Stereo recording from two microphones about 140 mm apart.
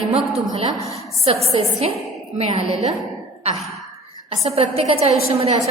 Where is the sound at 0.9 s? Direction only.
45° right (ahead or behind).